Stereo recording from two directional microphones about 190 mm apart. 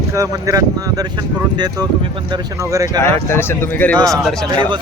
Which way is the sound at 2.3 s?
15° right (ahead or behind).